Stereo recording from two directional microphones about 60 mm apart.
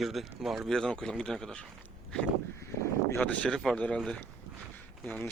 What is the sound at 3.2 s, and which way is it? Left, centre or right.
Speech, centre.